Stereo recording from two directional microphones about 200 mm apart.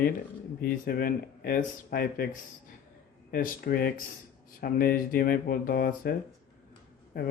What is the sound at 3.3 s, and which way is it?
Speech, 45° left (ahead or behind).